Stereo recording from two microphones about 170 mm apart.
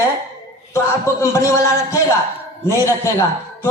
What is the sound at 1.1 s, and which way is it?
Speech, 15° left (ahead or behind).